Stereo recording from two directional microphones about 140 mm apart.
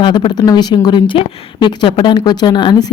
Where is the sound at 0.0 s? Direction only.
35° left (ahead or behind).